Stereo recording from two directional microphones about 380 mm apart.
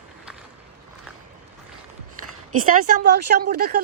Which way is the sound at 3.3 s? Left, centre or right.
Right.